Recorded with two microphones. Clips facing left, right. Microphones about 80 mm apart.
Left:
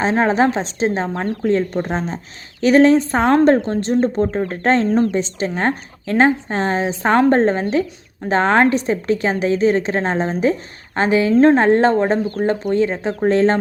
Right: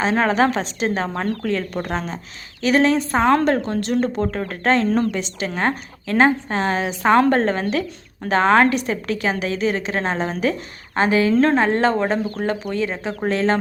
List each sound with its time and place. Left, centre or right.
0.0 s a woman's voice: left